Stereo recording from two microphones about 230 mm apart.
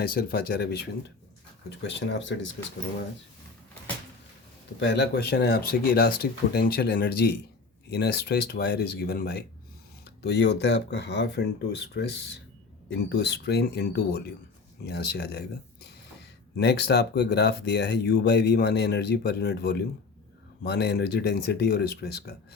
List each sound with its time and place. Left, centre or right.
0.0 s speech: left
4.8 s speech: left